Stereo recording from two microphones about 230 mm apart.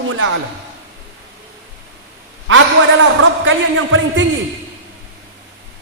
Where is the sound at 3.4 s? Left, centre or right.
Right.